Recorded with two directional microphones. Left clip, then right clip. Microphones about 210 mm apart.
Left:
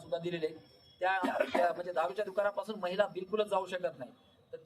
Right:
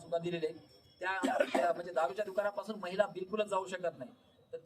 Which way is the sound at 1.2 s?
50° right (ahead or behind).